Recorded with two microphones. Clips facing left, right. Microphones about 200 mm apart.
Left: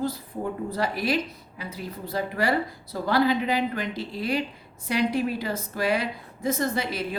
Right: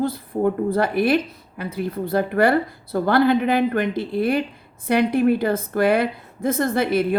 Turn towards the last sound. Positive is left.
turn(degrees=-55)  # may be behind; listen again after turning